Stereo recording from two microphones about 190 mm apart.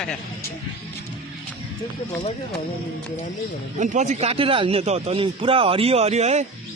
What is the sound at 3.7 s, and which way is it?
Speech, 40° right (ahead or behind).